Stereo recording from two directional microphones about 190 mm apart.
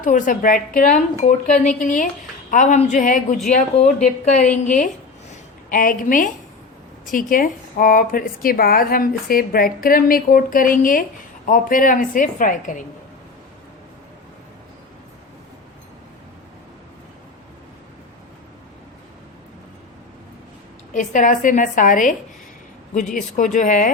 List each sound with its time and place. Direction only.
0.0 s a woman's voice: 45° left (ahead or behind)
20.9 s a woman's voice: 40° left (ahead or behind)